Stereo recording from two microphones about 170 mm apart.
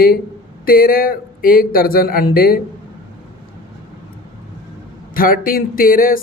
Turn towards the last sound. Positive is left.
turn(degrees=55)  # may be behind; listen again after turning